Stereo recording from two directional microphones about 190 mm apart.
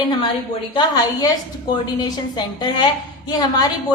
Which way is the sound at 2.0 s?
20° left (ahead or behind).